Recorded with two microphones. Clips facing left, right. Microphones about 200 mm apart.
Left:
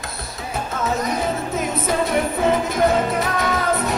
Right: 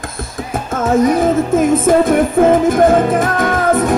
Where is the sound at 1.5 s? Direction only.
50° right (ahead or behind).